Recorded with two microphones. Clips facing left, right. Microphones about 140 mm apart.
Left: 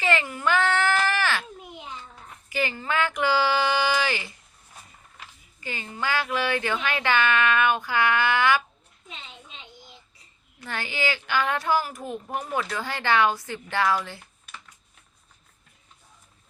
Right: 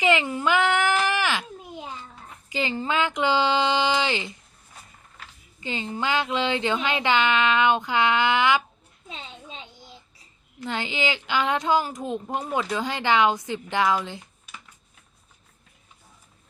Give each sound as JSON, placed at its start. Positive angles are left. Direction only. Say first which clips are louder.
{"t": 0.0, "sound": "a sound", "louder": "right 3 dB", "side_deg": -15}
{"t": 2.5, "sound": "speech", "louder": "right 1 dB", "side_deg": -20}
{"t": 5.5, "sound": "speech", "louder": "right 4 dB", "side_deg": -20}
{"t": 10.7, "sound": "speech", "louder": "right 2 dB", "side_deg": -20}